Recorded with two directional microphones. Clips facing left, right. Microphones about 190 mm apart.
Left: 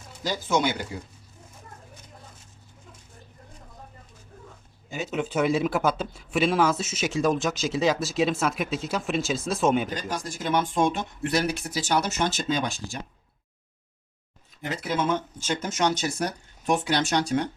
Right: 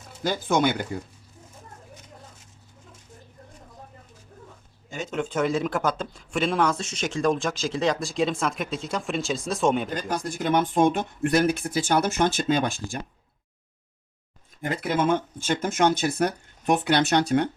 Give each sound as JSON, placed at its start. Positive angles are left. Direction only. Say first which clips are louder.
{"t": 0.2, "sound": "speech", "louder": "right 2 dB", "side_deg": -55}
{"t": 4.9, "sound": "speech", "louder": "even", "side_deg": 5}
{"t": 9.9, "sound": "speech", "louder": "right 3 dB", "side_deg": -55}
{"t": 14.6, "sound": "speech", "louder": "right 3 dB", "side_deg": -55}